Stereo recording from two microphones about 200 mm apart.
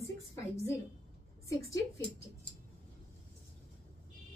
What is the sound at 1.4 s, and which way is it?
Speech, 15° left (ahead or behind).